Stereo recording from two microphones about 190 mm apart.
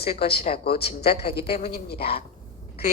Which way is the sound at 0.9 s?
30° left (ahead or behind).